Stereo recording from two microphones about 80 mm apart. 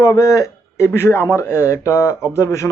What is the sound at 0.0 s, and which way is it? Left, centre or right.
Speech, left.